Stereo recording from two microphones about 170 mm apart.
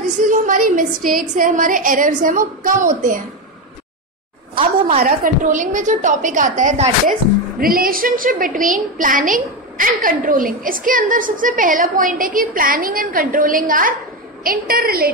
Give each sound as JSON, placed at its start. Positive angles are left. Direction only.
{"t": 0.2, "sound": "a woman's voice", "side_deg": -50}
{"t": 4.8, "sound": "a woman's voice", "side_deg": -50}
{"t": 7.6, "sound": "a woman's voice", "side_deg": -55}